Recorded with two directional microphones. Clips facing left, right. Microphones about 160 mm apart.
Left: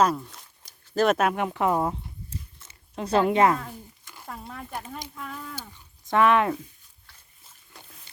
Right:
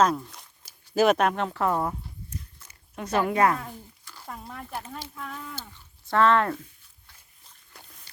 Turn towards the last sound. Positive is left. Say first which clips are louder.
# left 1 dB
turn(degrees=15)  # may be behind; listen again after turning